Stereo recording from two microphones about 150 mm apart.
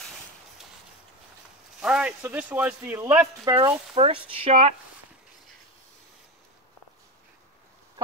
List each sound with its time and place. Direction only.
1.8 s speech: 5° right (ahead or behind); by 3.7 s 25° right (ahead or behind)
3.9 s speech: 35° right (ahead or behind)